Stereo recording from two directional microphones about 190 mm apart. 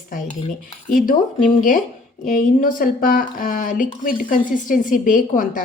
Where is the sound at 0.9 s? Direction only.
45° left (ahead or behind).